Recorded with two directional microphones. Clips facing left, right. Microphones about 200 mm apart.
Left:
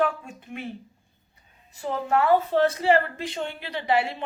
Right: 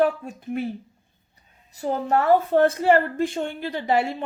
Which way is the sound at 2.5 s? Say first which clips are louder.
Right 3 dB; 50° right (ahead or behind).